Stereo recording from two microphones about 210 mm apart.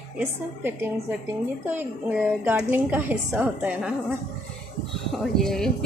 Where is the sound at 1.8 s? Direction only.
10° right (ahead or behind).